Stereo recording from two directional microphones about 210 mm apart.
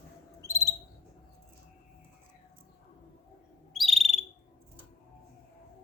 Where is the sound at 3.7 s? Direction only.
Centre (ahead or behind).